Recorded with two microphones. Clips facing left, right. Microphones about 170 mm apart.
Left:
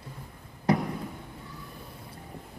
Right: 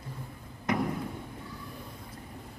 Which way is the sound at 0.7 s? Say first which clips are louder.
Left 4 dB; 35° left (ahead or behind).